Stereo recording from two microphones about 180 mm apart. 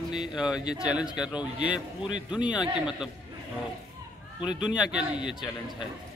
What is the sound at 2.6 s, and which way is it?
Speech, 5° right (ahead or behind).